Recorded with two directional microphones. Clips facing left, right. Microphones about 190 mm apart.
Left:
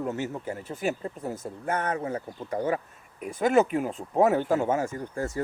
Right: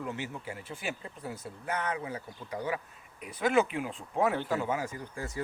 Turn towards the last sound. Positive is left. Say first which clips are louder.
# left 7 dB
turn(degrees=45)  # may be behind; listen again after turning